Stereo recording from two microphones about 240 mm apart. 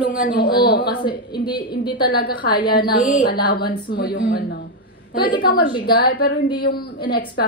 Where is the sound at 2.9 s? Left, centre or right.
Left.